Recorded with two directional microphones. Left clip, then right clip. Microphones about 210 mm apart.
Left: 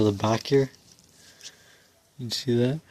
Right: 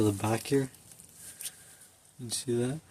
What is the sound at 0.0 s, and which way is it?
Speech, 30° left (ahead or behind).